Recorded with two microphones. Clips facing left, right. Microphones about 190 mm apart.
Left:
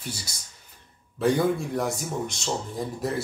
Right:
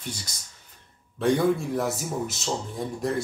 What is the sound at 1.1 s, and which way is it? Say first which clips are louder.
Speech: right 1 dB; centre (ahead or behind).